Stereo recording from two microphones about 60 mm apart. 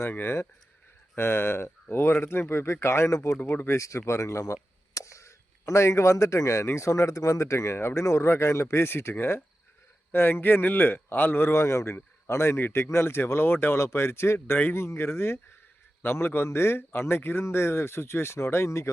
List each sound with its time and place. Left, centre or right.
0.1 s a man's voice: left
3.1 s speech: left
3.5 s a man's voice: left
3.8 s a man's voice: left
11.5 s a man's voice: left
13.7 s a man's voice: left